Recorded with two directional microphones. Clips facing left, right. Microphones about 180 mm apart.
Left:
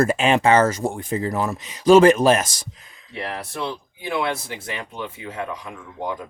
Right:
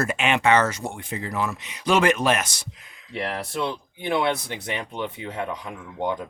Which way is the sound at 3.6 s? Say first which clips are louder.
Right 1 dB; 20° right (ahead or behind).